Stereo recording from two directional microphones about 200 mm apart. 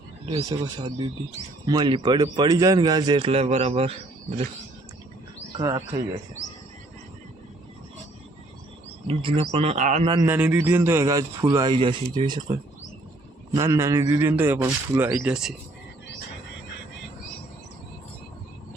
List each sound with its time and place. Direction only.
0.3 s a man's voice: 20° right (ahead or behind)
5.5 s a man's voice: 25° right (ahead or behind)
9.0 s speech: 25° right (ahead or behind)
10.2 s a man's voice: 10° right (ahead or behind)
13.5 s a man's voice: 15° right (ahead or behind)